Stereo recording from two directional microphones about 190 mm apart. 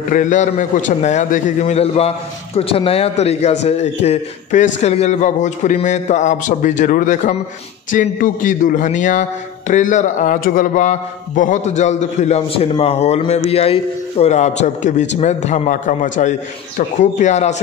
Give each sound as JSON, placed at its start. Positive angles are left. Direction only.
{"t": 0.1, "sound": "a man's voice", "side_deg": 40}